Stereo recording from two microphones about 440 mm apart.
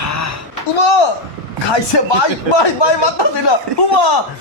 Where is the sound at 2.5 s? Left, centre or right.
Left.